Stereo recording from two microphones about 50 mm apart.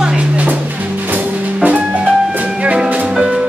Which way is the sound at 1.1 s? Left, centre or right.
Right.